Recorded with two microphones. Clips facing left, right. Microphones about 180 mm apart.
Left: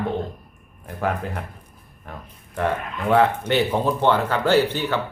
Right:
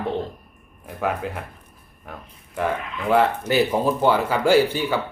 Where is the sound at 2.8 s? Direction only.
50° left (ahead or behind).